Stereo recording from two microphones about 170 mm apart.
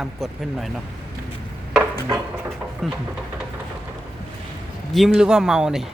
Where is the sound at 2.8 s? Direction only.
Centre (ahead or behind).